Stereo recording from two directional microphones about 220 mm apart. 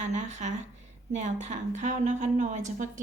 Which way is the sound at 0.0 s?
30° right (ahead or behind).